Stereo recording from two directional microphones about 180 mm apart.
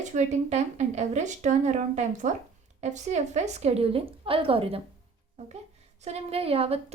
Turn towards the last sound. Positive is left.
turn(degrees=-35)  # may be behind; listen again after turning